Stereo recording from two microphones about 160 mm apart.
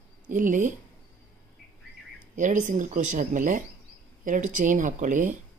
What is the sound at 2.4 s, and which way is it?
Speech, 50° right (ahead or behind).